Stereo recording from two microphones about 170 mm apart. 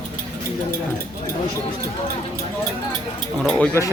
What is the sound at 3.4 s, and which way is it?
Speech, 5° left (ahead or behind).